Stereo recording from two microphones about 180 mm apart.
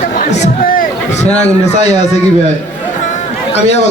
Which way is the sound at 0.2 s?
40° left (ahead or behind).